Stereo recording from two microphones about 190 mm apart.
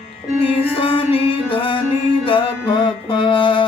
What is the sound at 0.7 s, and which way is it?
Music, 30° left (ahead or behind).